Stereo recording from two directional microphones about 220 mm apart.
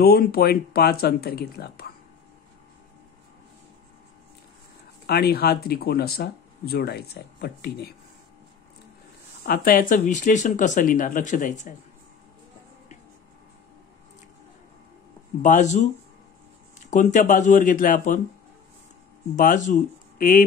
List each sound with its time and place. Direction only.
0.0 s speech: 45° left (ahead or behind)
5.0 s speech: 45° left (ahead or behind)
9.4 s speech: 40° left (ahead or behind)
15.4 s speech: 35° left (ahead or behind)
16.9 s speech: 35° left (ahead or behind)
19.3 s speech: 35° left (ahead or behind)